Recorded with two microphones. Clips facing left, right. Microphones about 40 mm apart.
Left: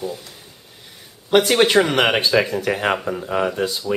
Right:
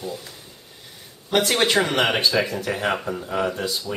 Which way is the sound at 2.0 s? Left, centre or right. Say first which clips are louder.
Left 3 dB; left.